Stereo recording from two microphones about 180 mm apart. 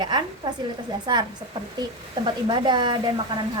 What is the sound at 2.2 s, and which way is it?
Speech, 25° right (ahead or behind).